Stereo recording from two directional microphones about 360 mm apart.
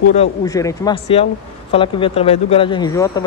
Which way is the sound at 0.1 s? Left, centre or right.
Centre.